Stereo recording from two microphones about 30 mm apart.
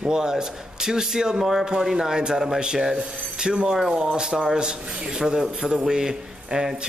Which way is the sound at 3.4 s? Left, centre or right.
Right.